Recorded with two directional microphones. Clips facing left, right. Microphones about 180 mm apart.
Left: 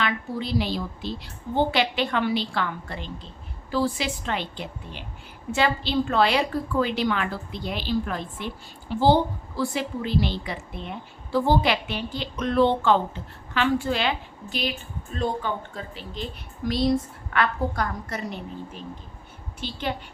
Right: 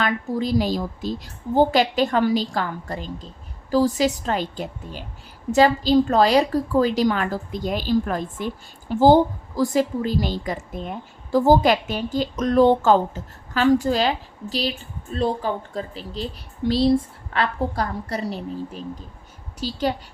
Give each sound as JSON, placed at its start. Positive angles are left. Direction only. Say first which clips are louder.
{"t": 0.0, "sound": "a woman's voice", "louder": "right 5 dB", "side_deg": -45}